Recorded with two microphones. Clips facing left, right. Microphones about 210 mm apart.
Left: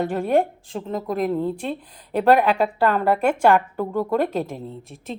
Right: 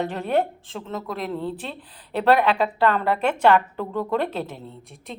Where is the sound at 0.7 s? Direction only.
35° left (ahead or behind).